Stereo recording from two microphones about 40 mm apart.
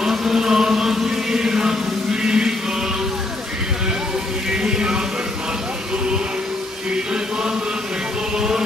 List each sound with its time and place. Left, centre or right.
0.0 s chant: centre
2.2 s music: centre
4.5 s music: centre
8.4 s music: centre